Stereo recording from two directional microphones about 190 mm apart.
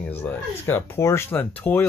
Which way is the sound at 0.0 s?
10° left (ahead or behind).